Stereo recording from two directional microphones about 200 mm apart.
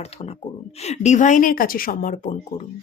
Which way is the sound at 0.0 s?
30° left (ahead or behind).